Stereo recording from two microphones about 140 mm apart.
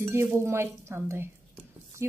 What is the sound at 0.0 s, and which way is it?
Speech, 20° right (ahead or behind).